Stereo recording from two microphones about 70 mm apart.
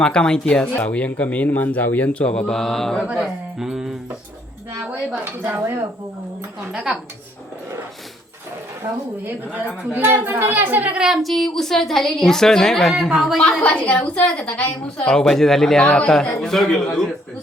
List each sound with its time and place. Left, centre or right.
0.0 s a woman's voice: centre
3.2 s speech: centre
5.2 s speech: right
6.7 s a woman's voice: centre
9.2 s speech: right
10.9 s a woman's voice: centre
13.4 s a woman's voice: centre